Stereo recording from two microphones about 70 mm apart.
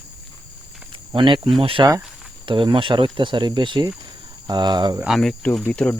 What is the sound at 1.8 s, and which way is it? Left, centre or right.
Speech, right.